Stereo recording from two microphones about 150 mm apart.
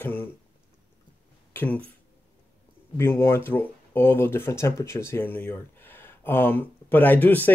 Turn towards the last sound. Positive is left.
turn(degrees=10)  # may be behind; listen again after turning